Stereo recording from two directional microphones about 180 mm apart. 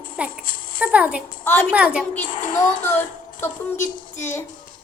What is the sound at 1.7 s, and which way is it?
Speech, 5° right (ahead or behind).